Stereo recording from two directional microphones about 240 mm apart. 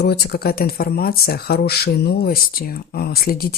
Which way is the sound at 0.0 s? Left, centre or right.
Left.